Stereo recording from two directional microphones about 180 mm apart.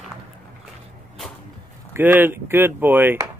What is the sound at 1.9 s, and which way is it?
Speech, 10° right (ahead or behind).